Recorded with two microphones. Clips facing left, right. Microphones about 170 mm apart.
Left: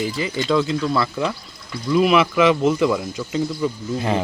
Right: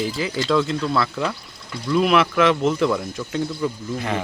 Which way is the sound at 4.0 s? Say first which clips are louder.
Left 4 dB; 30° left (ahead or behind).